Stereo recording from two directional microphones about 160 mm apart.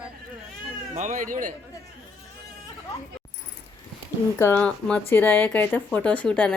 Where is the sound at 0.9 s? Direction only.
50° right (ahead or behind).